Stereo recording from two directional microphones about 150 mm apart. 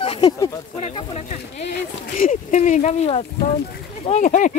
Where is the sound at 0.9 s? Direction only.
45° left (ahead or behind).